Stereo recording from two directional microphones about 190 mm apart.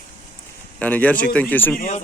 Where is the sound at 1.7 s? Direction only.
45° left (ahead or behind).